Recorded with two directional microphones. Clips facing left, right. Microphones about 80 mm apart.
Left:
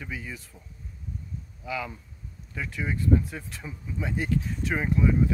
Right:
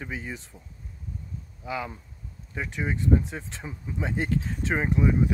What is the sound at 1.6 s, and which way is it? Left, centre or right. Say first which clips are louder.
A man's voice: right 1 dB; right.